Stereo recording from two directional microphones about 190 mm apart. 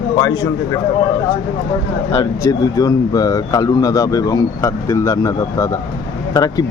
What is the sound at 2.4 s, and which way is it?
Speech, 20° left (ahead or behind).